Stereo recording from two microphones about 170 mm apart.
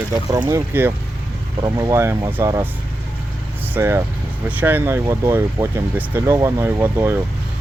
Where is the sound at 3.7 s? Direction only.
15° right (ahead or behind).